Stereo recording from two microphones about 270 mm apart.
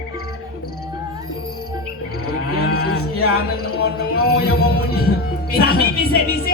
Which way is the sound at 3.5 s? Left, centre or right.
Left.